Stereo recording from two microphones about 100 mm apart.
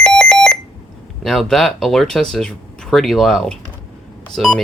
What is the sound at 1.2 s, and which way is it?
Speech, centre (ahead or behind).